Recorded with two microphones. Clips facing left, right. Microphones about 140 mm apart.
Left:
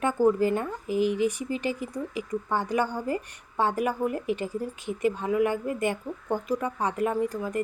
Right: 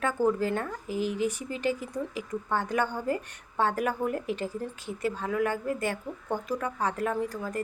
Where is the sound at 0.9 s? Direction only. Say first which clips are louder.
Left 5 dB; 45° right (ahead or behind).